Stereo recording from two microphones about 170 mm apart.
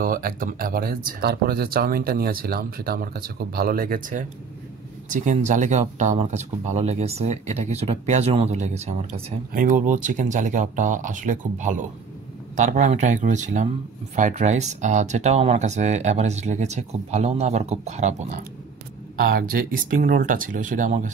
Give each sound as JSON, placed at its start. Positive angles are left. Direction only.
{"t": 0.0, "sound": "speech", "side_deg": -55}
{"t": 9.5, "sound": "speech", "side_deg": -50}
{"t": 19.1, "sound": "speech", "side_deg": -60}